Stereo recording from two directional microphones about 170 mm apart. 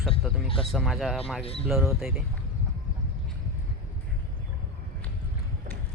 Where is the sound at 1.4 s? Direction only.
35° left (ahead or behind).